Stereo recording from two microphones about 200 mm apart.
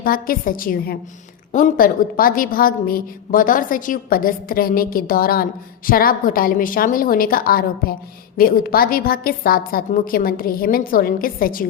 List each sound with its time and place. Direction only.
0.0 s a woman's voice: 45° left (ahead or behind)